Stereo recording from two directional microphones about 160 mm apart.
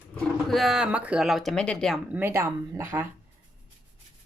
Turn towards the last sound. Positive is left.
turn(degrees=-15)  # may be behind; listen again after turning